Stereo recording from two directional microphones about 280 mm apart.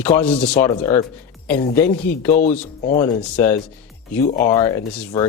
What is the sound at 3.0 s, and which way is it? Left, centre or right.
Speech, centre.